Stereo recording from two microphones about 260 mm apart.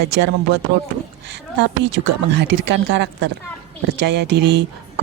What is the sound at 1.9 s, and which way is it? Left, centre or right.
Speech, right.